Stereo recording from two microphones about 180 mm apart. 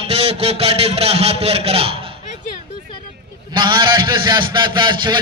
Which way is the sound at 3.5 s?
25° right (ahead or behind).